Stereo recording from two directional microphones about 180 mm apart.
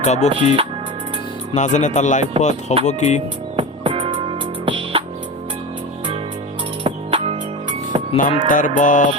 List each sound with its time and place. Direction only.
0.0 s speech: 40° left (ahead or behind)
0.3 s music: 30° right (ahead or behind)
1.5 s speech: 40° left (ahead or behind)
3.6 s music: 30° right (ahead or behind)
6.8 s music: 30° right (ahead or behind)
8.4 s speech: 45° left (ahead or behind)